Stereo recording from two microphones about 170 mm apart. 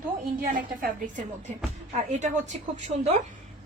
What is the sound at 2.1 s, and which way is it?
A woman's voice, 45° right (ahead or behind).